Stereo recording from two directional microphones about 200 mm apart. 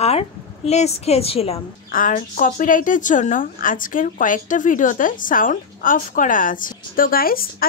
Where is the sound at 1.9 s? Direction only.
40° left (ahead or behind).